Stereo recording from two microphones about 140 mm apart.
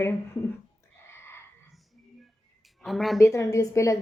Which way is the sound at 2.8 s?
Centre (ahead or behind).